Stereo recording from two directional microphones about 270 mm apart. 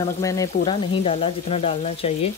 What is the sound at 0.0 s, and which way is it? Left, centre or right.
Speech, centre.